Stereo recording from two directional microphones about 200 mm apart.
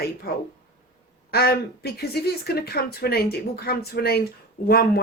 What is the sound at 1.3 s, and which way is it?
Speech, 50° left (ahead or behind).